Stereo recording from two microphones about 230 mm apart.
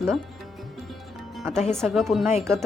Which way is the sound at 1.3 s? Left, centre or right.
Centre.